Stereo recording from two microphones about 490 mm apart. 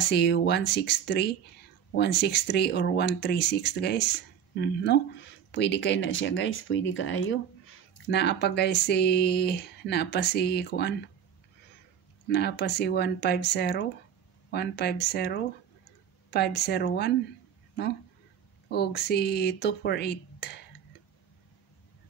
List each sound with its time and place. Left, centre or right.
0.1 s speech: left
12.3 s speech: left
18.7 s speech: centre